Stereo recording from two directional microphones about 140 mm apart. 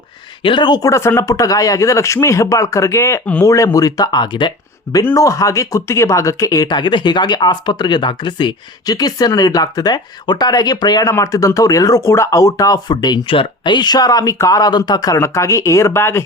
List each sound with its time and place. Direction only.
0.4 s speech: 35° left (ahead or behind); by 16.2 s 15° left (ahead or behind)